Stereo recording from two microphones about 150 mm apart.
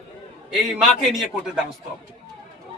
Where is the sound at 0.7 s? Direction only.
5° right (ahead or behind).